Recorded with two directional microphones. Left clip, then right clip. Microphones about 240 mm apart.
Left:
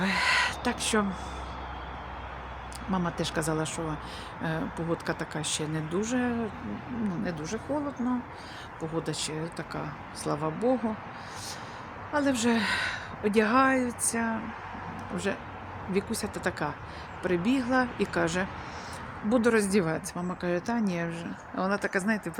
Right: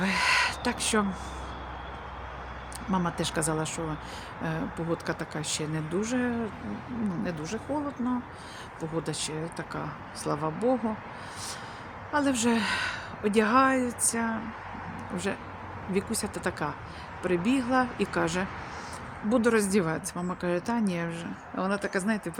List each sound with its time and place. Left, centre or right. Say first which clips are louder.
0.0 s owl: right 1 dB; centre
2.9 s a woman's voice: right 1 dB; centre
8.0 s speech: even; left
8.8 s a woman's voice: even; centre
12.1 s a woman's voice: even; centre